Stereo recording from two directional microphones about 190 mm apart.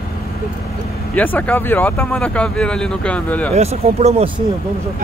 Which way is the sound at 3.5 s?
35° right (ahead or behind).